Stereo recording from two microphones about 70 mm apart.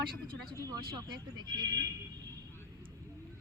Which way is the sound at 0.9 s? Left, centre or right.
Right.